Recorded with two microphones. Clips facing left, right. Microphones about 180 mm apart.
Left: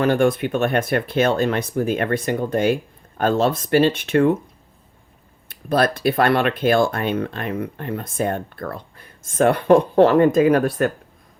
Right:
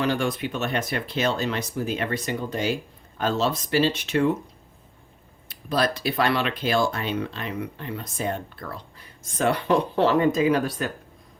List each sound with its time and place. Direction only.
0.0 s speech: 55° left (ahead or behind)
5.5 s speech: 55° left (ahead or behind)